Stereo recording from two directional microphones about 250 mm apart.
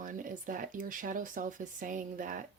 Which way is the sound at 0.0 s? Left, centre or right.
Right.